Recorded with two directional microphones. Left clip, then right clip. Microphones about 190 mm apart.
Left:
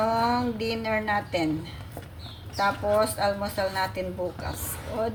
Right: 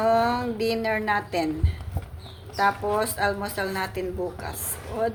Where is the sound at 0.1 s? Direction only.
55° right (ahead or behind).